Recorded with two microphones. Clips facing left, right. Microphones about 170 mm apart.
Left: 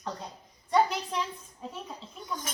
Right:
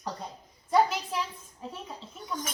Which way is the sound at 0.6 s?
5° right (ahead or behind).